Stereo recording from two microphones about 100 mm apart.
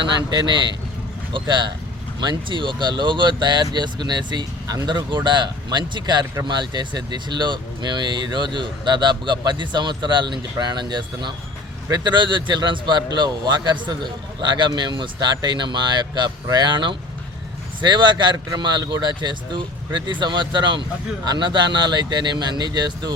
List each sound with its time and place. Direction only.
0.0 s speech: 50° right (ahead or behind)